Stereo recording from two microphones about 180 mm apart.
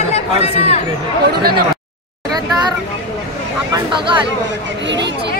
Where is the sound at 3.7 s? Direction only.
25° right (ahead or behind).